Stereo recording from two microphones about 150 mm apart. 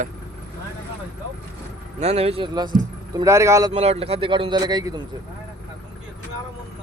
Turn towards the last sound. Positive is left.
turn(degrees=-25)  # may be behind; listen again after turning